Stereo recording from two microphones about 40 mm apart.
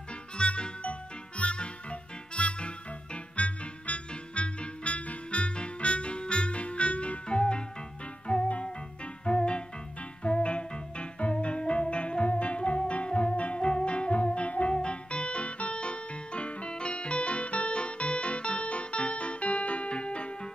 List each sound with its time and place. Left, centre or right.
0.4 s music: left